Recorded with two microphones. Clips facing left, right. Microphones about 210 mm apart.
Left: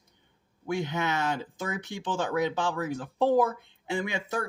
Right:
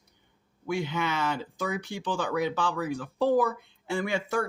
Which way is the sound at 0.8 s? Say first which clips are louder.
Even; 20° left (ahead or behind).